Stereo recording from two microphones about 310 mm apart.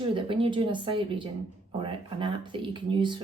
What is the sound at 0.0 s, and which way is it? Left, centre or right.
Speech, centre.